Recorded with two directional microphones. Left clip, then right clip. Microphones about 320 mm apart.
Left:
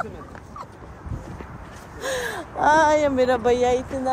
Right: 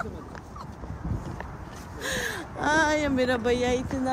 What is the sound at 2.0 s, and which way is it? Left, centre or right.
Speech, centre.